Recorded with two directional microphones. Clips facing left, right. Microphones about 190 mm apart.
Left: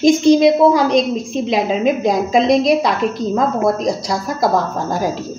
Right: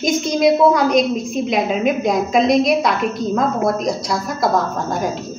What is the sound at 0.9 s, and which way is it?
A woman's voice, 30° left (ahead or behind).